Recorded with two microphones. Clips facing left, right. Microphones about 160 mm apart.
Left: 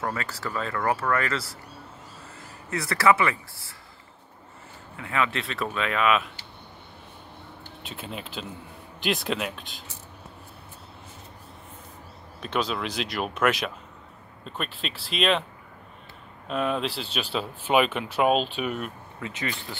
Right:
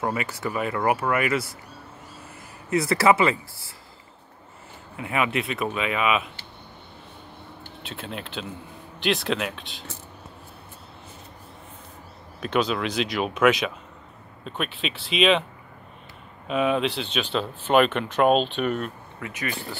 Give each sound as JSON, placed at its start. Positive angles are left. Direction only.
{"t": 0.0, "sound": "speech", "side_deg": -15}
{"t": 2.7, "sound": "speech", "side_deg": -25}
{"t": 4.9, "sound": "speech", "side_deg": -20}
{"t": 7.8, "sound": "speech", "side_deg": 0}
{"t": 12.4, "sound": "speech", "side_deg": 0}
{"t": 16.4, "sound": "speech", "side_deg": -5}
{"t": 19.2, "sound": "speech", "side_deg": 25}